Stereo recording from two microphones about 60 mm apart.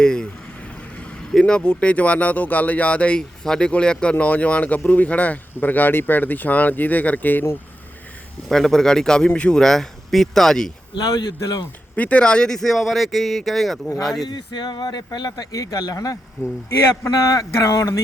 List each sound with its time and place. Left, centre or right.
0.0 s vehicle: centre
1.3 s speech: centre
3.4 s a man's voice: centre; by 7.4 s left
8.4 s a man's voice: centre
11.0 s speech: left
11.9 s speech: left; by 14.3 s centre
15.4 s speech: left
17.1 s speech: left